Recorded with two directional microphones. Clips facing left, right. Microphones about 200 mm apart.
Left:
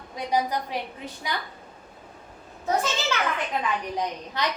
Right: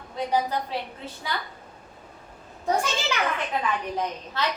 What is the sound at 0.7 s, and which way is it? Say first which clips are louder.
Speech: even; 15° left (ahead or behind).